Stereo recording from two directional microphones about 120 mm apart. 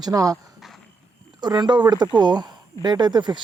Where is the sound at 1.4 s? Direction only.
35° right (ahead or behind).